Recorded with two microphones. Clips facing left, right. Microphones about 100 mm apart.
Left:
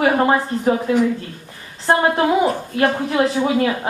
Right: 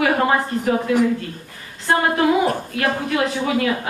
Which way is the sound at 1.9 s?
35° left (ahead or behind).